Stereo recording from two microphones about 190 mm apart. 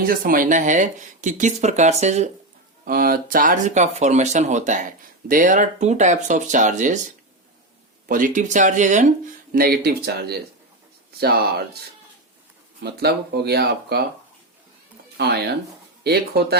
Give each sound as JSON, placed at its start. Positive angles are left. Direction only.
{"t": 0.0, "sound": "speech", "side_deg": -45}
{"t": 2.8, "sound": "speech", "side_deg": -50}
{"t": 8.0, "sound": "speech", "side_deg": -45}
{"t": 12.8, "sound": "speech", "side_deg": -60}
{"t": 15.2, "sound": "speech", "side_deg": -60}